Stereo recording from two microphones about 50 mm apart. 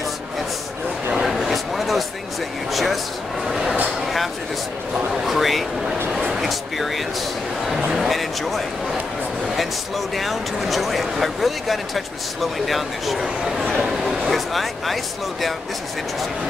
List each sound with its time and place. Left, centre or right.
1.3 s a sound: centre
5.2 s speech: centre
7.9 s speech: centre